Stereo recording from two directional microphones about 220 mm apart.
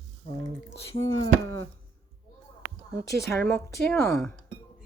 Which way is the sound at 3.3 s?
5° left (ahead or behind).